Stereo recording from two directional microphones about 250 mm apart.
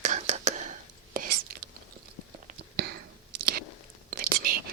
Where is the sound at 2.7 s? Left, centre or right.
Right.